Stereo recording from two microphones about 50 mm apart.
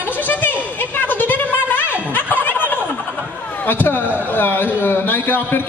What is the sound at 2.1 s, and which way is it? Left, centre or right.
Snicker, left.